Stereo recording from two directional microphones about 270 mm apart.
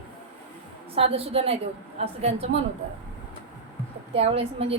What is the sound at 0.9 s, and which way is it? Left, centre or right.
A woman's voice, right.